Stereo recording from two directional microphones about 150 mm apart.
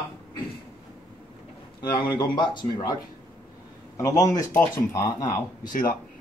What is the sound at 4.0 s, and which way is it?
Speech, 20° left (ahead or behind).